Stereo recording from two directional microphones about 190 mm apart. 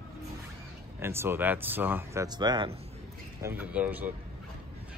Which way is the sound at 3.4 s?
10° right (ahead or behind).